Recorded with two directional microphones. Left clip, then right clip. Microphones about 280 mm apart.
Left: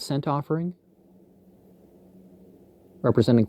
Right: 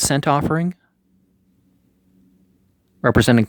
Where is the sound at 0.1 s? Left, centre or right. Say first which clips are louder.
Right 6 dB; right.